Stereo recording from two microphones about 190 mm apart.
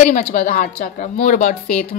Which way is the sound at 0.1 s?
40° left (ahead or behind).